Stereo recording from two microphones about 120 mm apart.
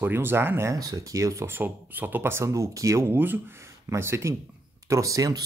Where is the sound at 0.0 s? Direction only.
20° right (ahead or behind).